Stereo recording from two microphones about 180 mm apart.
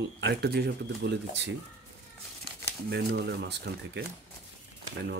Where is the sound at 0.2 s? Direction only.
65° right (ahead or behind).